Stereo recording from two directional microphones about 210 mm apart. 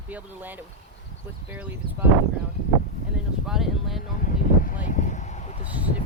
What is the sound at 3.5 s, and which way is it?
Speech, centre (ahead or behind).